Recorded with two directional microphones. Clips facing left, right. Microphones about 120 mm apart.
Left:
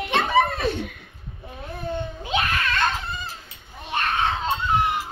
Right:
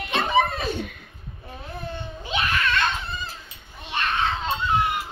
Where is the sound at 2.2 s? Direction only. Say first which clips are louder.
Right 1 dB; 45° left (ahead or behind).